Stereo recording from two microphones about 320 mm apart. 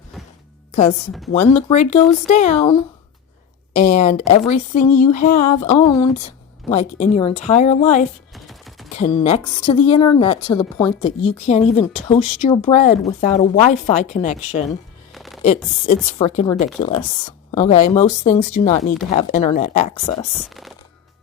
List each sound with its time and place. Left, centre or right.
1.3 s speech: centre
8.3 s a sound: centre
9.0 s a woman's voice: left
15.1 s music: centre
16.1 s speech: centre
20.5 s a sound: centre